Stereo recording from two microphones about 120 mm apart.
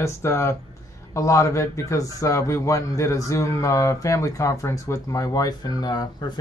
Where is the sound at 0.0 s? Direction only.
25° left (ahead or behind).